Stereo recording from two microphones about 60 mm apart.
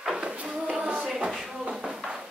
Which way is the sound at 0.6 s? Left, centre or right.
Centre.